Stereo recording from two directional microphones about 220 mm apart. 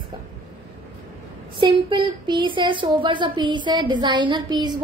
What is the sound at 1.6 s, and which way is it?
Speech, 20° right (ahead or behind).